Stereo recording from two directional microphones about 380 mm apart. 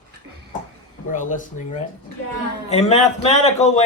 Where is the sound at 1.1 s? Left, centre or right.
Centre.